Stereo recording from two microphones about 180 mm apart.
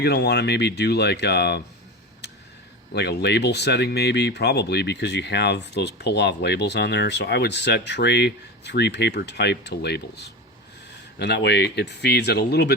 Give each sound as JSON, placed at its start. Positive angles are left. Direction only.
{"t": 0.0, "sound": "speech", "side_deg": 65}
{"t": 2.2, "sound": "a sound", "side_deg": 70}
{"t": 2.9, "sound": "speech", "side_deg": 65}